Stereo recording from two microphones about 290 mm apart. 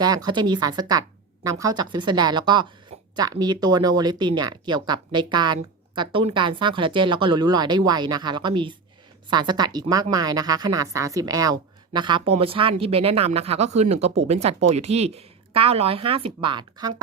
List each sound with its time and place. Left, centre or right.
0.0 s speech: centre